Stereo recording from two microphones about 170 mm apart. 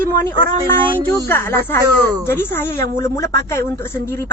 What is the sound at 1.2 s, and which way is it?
A woman's voice, 15° left (ahead or behind).